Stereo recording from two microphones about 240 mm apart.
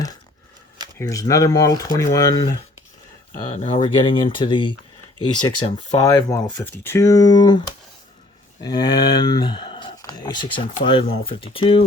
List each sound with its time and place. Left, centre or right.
0.9 s speech: centre
3.5 s speech: left
8.6 s speech: centre